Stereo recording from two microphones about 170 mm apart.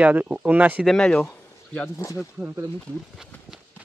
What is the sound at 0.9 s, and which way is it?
Speech, 5° left (ahead or behind).